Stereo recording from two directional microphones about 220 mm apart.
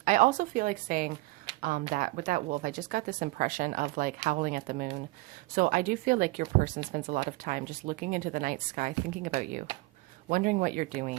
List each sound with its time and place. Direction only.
0.0 s speech: 35° right (ahead or behind)
1.5 s a sound: 20° right (ahead or behind)
1.9 s speech: 35° right (ahead or behind)